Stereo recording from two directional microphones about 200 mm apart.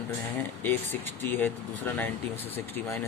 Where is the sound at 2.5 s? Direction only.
10° left (ahead or behind).